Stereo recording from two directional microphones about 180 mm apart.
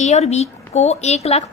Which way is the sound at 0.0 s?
40° left (ahead or behind).